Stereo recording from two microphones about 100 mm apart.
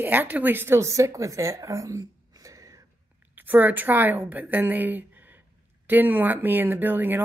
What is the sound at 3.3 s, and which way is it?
A woman's voice, 20° right (ahead or behind).